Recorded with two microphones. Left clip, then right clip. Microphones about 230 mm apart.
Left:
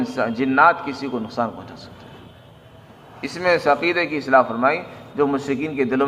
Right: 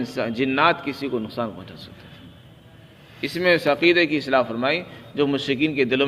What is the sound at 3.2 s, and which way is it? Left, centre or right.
A man's voice, right.